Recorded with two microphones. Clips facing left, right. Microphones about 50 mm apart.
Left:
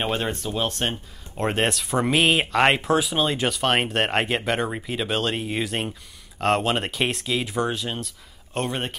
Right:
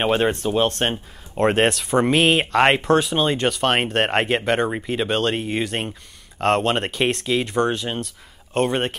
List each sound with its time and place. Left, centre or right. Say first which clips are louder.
0.0 s speech: right 6 dB; right
1.3 s speech: right 6 dB; centre